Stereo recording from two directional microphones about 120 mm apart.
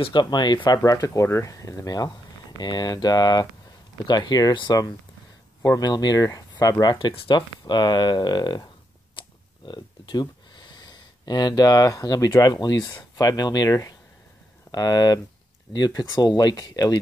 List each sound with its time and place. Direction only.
0.0 s speech: 40° left (ahead or behind)
9.2 s a sound: 45° left (ahead or behind)
9.7 s speech: 40° left (ahead or behind)